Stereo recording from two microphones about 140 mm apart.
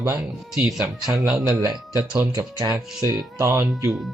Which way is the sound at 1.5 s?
25° right (ahead or behind).